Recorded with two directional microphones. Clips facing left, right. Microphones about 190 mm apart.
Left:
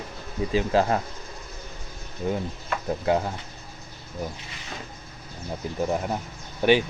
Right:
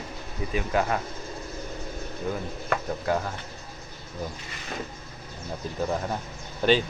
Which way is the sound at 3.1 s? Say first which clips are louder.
Left 4 dB; 20° left (ahead or behind).